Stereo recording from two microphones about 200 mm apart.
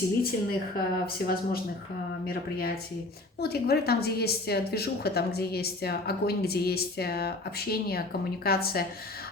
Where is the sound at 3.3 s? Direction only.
50° left (ahead or behind).